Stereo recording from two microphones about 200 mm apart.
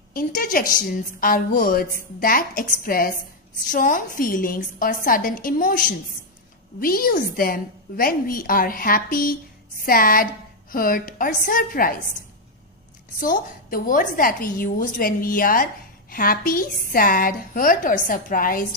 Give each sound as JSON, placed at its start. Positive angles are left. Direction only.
{"t": 0.1, "sound": "a woman's voice", "side_deg": 45}
{"t": 13.2, "sound": "a woman's voice", "side_deg": 45}